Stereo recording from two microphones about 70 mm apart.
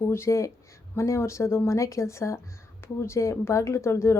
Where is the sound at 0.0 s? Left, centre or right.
Left.